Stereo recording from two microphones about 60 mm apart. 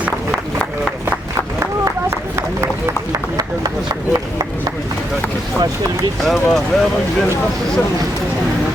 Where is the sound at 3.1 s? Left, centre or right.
Right.